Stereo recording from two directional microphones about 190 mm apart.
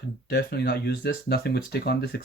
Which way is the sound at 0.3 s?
60° left (ahead or behind).